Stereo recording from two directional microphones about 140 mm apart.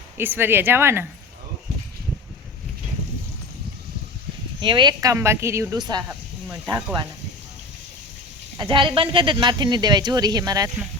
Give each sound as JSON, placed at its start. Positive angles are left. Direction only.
{"t": 0.2, "sound": "speech", "side_deg": -15}
{"t": 4.6, "sound": "speech", "side_deg": -35}
{"t": 5.8, "sound": "speech", "side_deg": -30}
{"t": 6.5, "sound": "speech", "side_deg": -15}
{"t": 8.5, "sound": "speech", "side_deg": -35}